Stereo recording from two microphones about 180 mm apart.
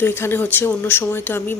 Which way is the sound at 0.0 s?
15° left (ahead or behind).